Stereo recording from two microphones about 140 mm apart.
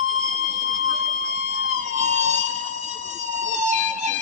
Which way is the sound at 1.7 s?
60° right (ahead or behind).